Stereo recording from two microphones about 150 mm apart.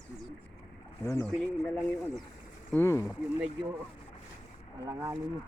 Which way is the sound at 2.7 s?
15° left (ahead or behind).